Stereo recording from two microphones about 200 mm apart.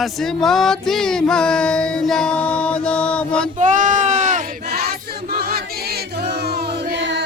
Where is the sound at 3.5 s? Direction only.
40° right (ahead or behind); by 7.2 s 60° right (ahead or behind).